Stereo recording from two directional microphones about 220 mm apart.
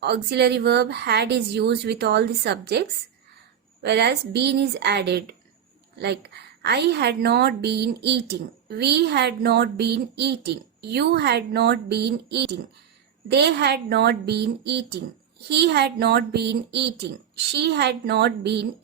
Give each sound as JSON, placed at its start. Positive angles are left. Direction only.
{"t": 0.0, "sound": "a woman's voice", "side_deg": -50}
{"t": 3.8, "sound": "a woman's voice", "side_deg": -50}
{"t": 6.6, "sound": "a woman's voice", "side_deg": -50}